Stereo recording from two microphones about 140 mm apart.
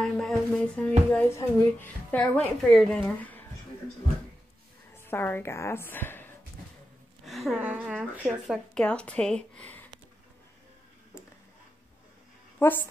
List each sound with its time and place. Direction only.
0.0 s music: 5° left (ahead or behind)
1.6 s speech: 10° left (ahead or behind)
4.9 s a woman's voice: 15° left (ahead or behind)
7.2 s speech: centre (ahead or behind)
8.7 s speech: 5° left (ahead or behind)
12.5 s speech: 15° left (ahead or behind)